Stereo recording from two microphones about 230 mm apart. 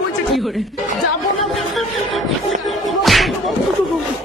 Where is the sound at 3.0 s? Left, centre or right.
Centre.